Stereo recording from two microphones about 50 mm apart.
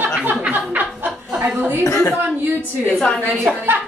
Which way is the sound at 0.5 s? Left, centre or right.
Right.